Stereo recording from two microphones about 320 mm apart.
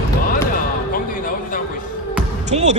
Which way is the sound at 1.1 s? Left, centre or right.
Left.